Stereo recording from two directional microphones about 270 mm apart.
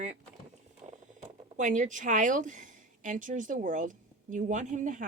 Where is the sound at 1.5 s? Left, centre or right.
Right.